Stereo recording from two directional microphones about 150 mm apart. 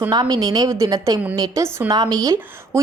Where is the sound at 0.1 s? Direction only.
25° right (ahead or behind).